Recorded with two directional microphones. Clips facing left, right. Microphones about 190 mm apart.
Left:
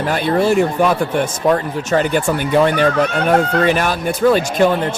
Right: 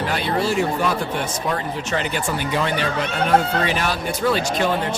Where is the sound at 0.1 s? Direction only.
50° left (ahead or behind).